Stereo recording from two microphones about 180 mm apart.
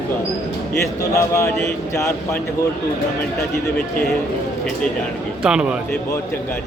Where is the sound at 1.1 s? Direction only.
15° left (ahead or behind).